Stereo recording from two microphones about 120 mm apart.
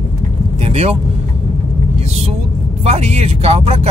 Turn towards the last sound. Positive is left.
turn(degrees=-55)  # may be behind; listen again after turning